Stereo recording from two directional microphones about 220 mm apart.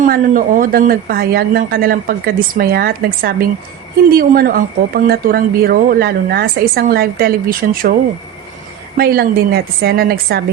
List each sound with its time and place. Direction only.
0.0 s speech: 35° right (ahead or behind)
9.0 s speech: 45° right (ahead or behind)